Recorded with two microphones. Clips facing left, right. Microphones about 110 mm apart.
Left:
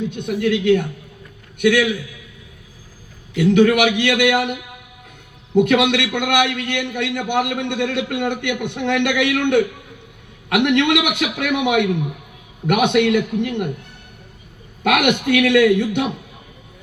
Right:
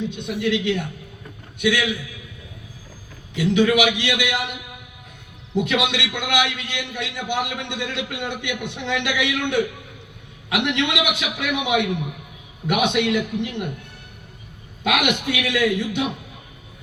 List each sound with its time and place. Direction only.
0.0 s a man's voice: 50° left (ahead or behind)
3.3 s a man's voice: 55° left (ahead or behind)
5.5 s a man's voice: 50° left (ahead or behind)
14.8 s a man's voice: 55° left (ahead or behind)